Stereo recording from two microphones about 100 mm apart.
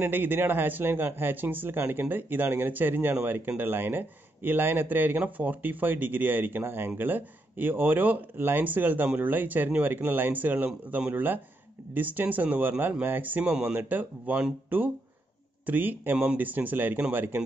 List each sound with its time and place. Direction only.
0.0 s a man's voice: 20° right (ahead or behind)